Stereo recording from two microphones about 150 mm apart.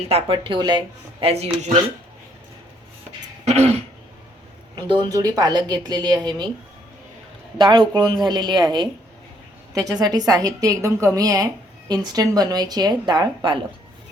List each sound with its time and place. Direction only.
0.1 s speech: 35° right (ahead or behind)
1.3 s speech: 45° right (ahead or behind)
3.4 s throat clearing: 45° right (ahead or behind)
4.7 s a woman's voice: 30° right (ahead or behind)
7.6 s a woman's voice: 30° right (ahead or behind)